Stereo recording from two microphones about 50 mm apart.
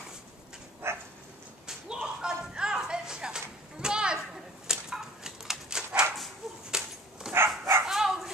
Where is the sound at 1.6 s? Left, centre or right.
Centre.